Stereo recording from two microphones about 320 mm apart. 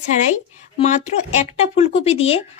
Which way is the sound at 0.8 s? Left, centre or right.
Left.